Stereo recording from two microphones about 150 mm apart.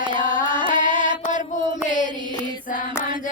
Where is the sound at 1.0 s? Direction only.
55° left (ahead or behind).